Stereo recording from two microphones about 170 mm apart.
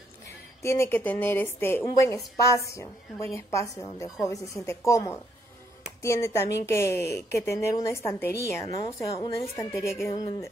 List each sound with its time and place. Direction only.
0.6 s a woman's voice: 15° left (ahead or behind)